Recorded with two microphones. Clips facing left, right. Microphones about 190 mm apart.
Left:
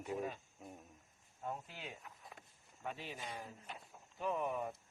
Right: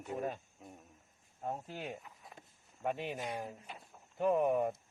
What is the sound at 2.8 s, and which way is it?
Speech, 60° right (ahead or behind).